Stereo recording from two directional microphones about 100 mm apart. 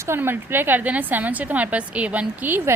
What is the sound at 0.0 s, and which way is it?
A woman's voice, 25° right (ahead or behind).